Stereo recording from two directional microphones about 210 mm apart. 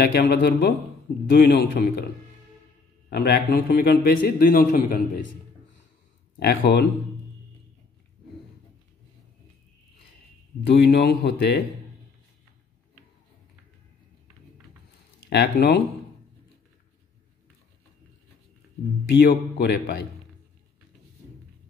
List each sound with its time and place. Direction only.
0.0 s a man's voice: 50° left (ahead or behind)
3.1 s a man's voice: 50° left (ahead or behind)
6.4 s a man's voice: 50° left (ahead or behind)
10.7 s a man's voice: 50° left (ahead or behind)
15.2 s a man's voice: 50° left (ahead or behind)
19.0 s a man's voice: 55° left (ahead or behind)